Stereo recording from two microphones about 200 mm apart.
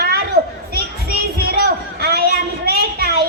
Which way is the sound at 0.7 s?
50° right (ahead or behind).